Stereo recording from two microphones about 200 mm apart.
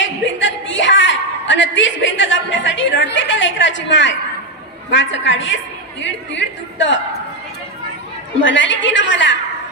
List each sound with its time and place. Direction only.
0.0 s a sound: 70° left (ahead or behind)
4.9 s a woman's voice: 70° left (ahead or behind)
8.4 s a woman's voice: 70° left (ahead or behind)